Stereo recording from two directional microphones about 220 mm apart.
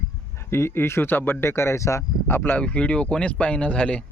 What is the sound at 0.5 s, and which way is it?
Speech, 10° left (ahead or behind).